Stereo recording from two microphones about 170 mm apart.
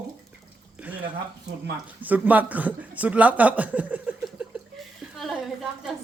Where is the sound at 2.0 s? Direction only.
10° right (ahead or behind).